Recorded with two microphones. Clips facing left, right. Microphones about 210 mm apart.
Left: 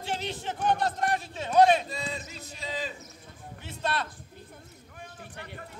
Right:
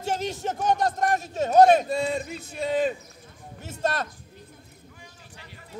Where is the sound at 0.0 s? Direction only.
45° right (ahead or behind).